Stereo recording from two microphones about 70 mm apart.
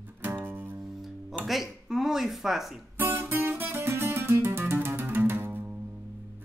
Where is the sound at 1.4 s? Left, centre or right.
Centre.